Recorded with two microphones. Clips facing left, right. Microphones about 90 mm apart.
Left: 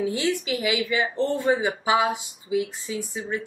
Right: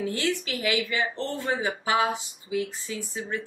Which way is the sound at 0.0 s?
10° left (ahead or behind).